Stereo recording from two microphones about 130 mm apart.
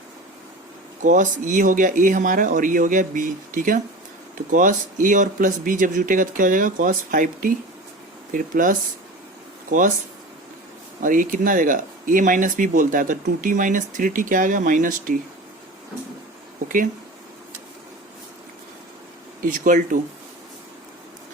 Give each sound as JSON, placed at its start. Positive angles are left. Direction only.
{"t": 1.0, "sound": "speech", "side_deg": -75}
{"t": 11.0, "sound": "speech", "side_deg": -90}
{"t": 19.4, "sound": "speech", "side_deg": -90}